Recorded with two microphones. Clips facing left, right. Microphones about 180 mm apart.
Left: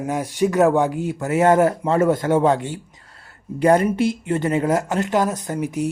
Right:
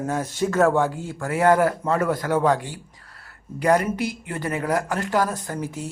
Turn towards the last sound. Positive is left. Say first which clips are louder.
# left 6 dB
turn(degrees=20)  # may be behind; listen again after turning